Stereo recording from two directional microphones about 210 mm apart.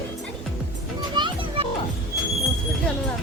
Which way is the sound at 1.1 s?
20° right (ahead or behind).